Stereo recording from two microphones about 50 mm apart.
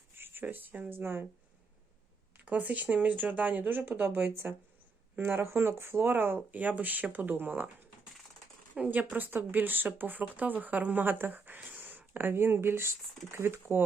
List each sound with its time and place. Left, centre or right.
0.2 s speech: right
0.9 s speech: right
2.4 s speech: right
5.1 s speech: right
6.5 s speech: right
8.7 s speech: right